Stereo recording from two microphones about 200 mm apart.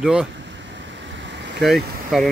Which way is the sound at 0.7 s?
65° right (ahead or behind).